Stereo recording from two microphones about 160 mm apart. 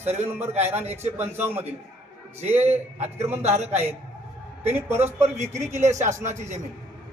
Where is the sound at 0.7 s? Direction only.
40° right (ahead or behind).